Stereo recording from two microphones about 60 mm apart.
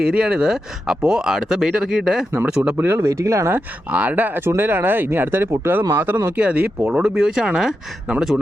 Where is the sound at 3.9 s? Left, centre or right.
Right.